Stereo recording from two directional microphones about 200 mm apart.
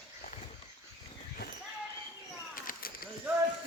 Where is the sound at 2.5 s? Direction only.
45° left (ahead or behind).